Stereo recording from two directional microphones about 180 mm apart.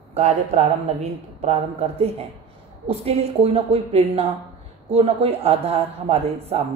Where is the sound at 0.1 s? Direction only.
35° right (ahead or behind).